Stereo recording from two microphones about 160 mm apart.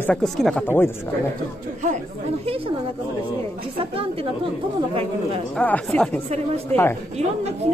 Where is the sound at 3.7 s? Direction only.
35° right (ahead or behind).